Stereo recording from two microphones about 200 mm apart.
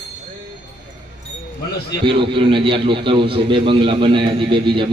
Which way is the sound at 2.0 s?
25° right (ahead or behind).